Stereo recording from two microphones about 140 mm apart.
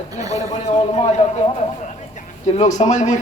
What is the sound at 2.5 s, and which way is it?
Speech, 60° left (ahead or behind).